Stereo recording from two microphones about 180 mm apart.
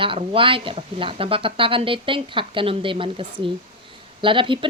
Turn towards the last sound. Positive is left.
turn(degrees=-30)  # may be behind; listen again after turning